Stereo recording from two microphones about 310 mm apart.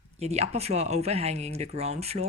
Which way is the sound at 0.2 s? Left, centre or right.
Right.